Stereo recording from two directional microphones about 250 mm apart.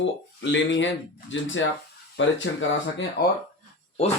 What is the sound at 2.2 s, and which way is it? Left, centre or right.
Speech, left.